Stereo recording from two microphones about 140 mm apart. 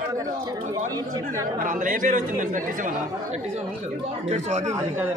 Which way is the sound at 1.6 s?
70° right (ahead or behind).